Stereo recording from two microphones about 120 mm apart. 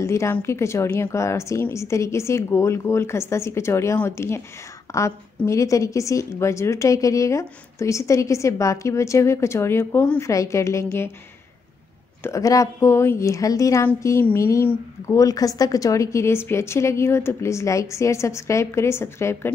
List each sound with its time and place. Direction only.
0.0 s a woman's voice: 25° left (ahead or behind)
12.2 s a woman's voice: 25° left (ahead or behind)